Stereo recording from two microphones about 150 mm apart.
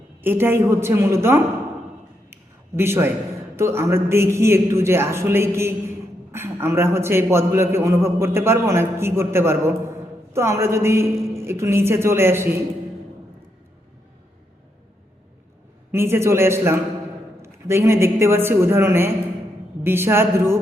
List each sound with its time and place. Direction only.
0.2 s a man's voice: 15° right (ahead or behind)
2.3 s a sound: 15° right (ahead or behind)
3.5 s a man's voice: 15° right (ahead or behind)
15.9 s a man's voice: 15° right (ahead or behind)